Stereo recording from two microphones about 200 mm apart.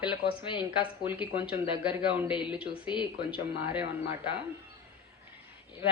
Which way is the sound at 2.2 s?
25° left (ahead or behind).